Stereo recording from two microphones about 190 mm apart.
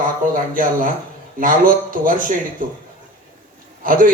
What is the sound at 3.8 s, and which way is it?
Speech, 45° right (ahead or behind).